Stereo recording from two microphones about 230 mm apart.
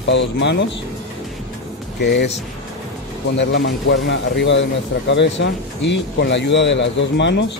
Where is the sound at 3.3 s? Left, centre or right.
Left.